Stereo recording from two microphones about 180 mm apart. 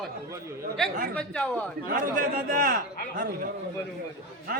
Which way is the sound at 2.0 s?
50° right (ahead or behind).